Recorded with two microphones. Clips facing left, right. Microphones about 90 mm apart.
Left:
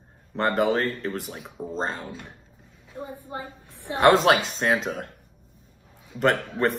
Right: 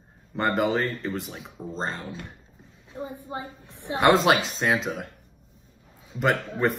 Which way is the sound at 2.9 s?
20° right (ahead or behind).